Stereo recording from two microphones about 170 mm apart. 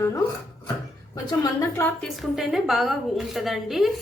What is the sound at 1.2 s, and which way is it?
Speech, 20° left (ahead or behind).